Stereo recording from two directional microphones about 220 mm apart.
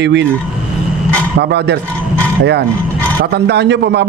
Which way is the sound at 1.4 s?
50° right (ahead or behind).